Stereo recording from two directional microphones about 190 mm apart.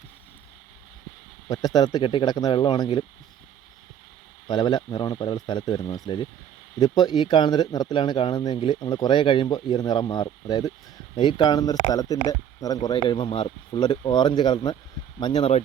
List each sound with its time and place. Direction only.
1.5 s speech: 20° left (ahead or behind)
4.4 s speech: 25° left (ahead or behind)